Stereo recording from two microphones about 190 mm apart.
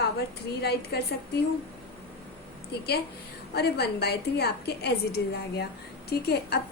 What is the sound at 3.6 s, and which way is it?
A woman's voice, 60° left (ahead or behind).